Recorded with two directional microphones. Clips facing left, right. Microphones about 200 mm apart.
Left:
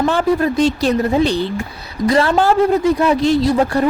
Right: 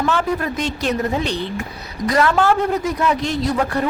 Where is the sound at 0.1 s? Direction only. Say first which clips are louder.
Left 5 dB; 30° left (ahead or behind).